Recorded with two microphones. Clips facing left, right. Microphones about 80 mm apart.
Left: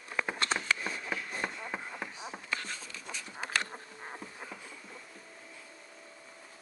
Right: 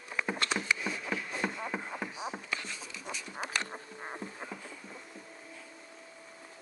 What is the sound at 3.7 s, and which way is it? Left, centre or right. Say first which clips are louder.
Insect: right 2 dB; centre.